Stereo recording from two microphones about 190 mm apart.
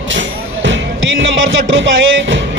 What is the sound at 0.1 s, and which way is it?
Music, 75° right (ahead or behind).